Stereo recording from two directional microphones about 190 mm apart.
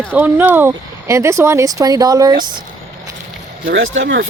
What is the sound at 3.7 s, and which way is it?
Speech, 85° right.